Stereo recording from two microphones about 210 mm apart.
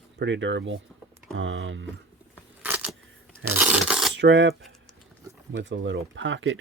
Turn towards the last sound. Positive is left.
turn(degrees=-65)  # may be behind; listen again after turning